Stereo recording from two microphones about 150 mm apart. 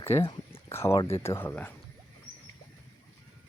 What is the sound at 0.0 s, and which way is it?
Speech, 15° left (ahead or behind).